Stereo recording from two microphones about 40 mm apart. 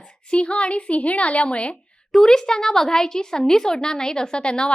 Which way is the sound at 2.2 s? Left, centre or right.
Centre.